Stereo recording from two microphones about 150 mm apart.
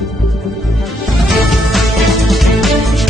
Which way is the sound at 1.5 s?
Centre (ahead or behind).